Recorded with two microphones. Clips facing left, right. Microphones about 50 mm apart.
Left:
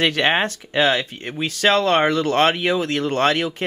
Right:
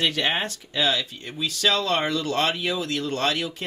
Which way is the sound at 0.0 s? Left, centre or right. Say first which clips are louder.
Left 6 dB; left.